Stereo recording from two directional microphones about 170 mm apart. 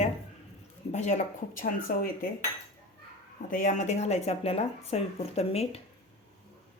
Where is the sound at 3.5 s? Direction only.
45° left (ahead or behind).